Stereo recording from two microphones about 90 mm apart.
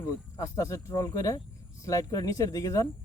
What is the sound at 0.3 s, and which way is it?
Speech, 40° left (ahead or behind).